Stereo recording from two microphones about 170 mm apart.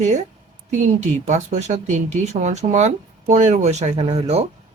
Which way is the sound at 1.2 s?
45° right (ahead or behind).